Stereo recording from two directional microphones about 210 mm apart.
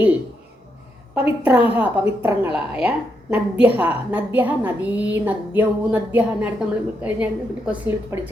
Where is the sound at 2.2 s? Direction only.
10° right (ahead or behind).